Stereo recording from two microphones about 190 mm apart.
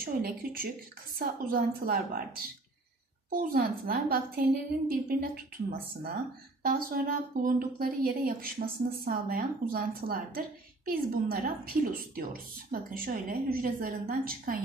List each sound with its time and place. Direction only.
0.0 s a woman's voice: 50° right (ahead or behind)